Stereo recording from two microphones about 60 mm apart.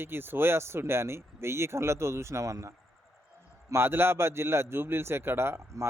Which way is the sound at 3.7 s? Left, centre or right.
Right.